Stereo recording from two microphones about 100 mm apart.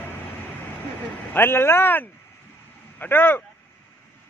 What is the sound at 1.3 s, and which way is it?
Speech, 25° left (ahead or behind).